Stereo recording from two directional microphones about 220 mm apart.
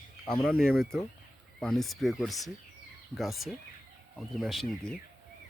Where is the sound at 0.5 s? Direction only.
40° left (ahead or behind).